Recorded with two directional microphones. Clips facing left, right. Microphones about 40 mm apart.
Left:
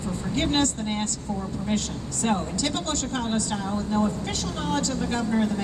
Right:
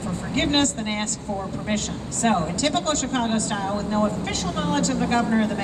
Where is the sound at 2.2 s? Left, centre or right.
Right.